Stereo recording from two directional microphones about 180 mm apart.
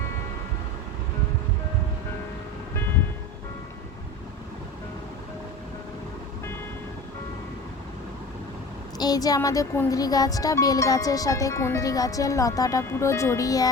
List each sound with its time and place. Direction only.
9.0 s speech: 20° left (ahead or behind)